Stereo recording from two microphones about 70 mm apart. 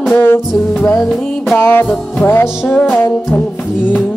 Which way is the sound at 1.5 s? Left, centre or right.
Left.